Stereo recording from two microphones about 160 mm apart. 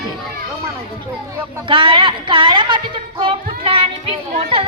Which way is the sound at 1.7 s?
30° right (ahead or behind).